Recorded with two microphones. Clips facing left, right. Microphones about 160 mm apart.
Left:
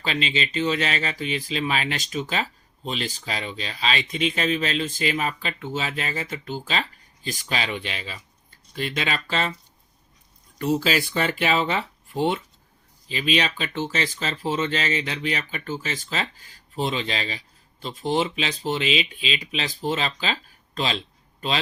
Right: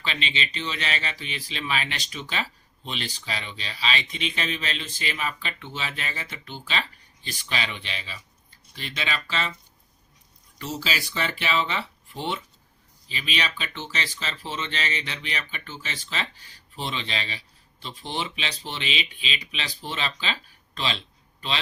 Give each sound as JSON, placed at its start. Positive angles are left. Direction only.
{"t": 0.0, "sound": "speech", "side_deg": 40}
{"t": 10.6, "sound": "speech", "side_deg": 50}